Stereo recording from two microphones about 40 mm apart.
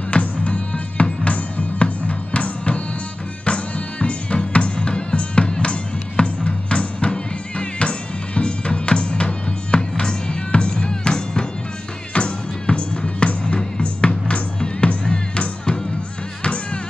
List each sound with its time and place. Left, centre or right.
0.1 s music: left